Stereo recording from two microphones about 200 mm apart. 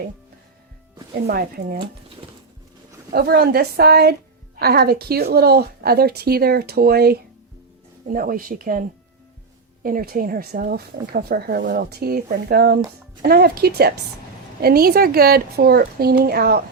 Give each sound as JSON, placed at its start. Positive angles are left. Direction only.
{"t": 1.3, "sound": "speech", "side_deg": -50}
{"t": 3.1, "sound": "speech", "side_deg": -50}
{"t": 9.8, "sound": "speech", "side_deg": -45}